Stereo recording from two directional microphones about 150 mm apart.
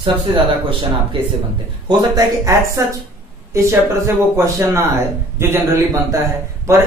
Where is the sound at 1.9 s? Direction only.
25° right (ahead or behind).